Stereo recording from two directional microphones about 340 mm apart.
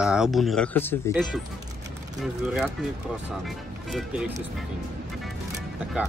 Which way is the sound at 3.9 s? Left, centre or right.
Centre.